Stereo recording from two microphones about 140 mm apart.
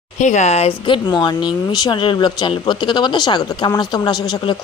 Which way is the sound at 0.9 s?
30° left (ahead or behind).